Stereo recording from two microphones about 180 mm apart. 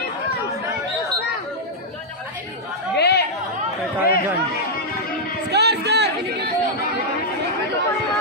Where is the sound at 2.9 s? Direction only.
70° left (ahead or behind).